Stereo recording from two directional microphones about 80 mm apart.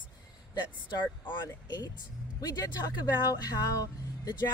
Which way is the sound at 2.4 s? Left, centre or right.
Left.